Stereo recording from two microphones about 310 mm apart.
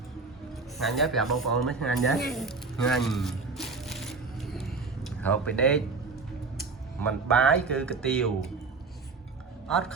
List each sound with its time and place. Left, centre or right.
0.8 s speech: centre
2.3 s a sound: centre
5.0 s speech: centre
9.6 s speech: centre